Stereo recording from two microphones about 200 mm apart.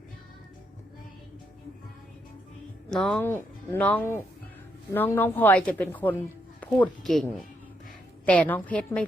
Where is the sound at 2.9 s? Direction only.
5° left (ahead or behind).